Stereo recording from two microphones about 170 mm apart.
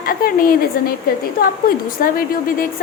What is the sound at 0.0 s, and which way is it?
A woman's voice, 60° left (ahead or behind).